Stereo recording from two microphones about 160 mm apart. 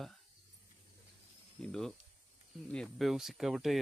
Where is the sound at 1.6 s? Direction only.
5° left (ahead or behind).